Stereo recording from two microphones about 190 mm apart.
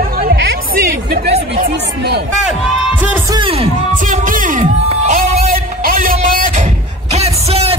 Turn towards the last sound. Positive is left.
turn(degrees=-30)  # may be behind; listen again after turning